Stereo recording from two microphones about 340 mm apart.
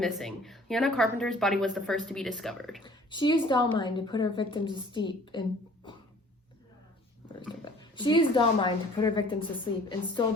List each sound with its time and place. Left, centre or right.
0.0 s a woman's voice: centre
2.8 s a woman's voice: centre
7.3 s a woman's voice: centre